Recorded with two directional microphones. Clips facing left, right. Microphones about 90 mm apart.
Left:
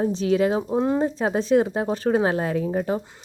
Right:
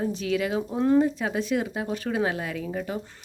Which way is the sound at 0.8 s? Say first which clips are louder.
Right 4 dB; 20° left (ahead or behind).